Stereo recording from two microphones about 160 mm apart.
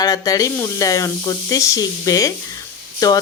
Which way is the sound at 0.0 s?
20° left (ahead or behind).